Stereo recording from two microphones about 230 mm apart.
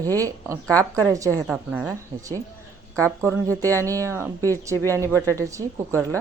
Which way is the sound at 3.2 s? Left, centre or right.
Centre.